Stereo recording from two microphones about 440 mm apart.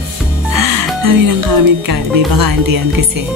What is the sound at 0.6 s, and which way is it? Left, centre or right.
Speech, right.